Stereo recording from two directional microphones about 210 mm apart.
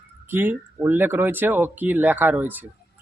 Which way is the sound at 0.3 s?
10° right (ahead or behind).